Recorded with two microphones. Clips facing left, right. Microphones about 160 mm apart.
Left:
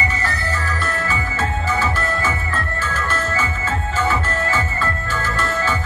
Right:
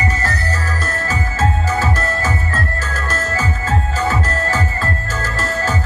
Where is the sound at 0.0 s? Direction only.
40° right (ahead or behind).